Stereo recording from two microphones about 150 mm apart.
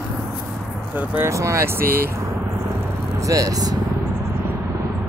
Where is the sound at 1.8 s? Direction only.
80° right.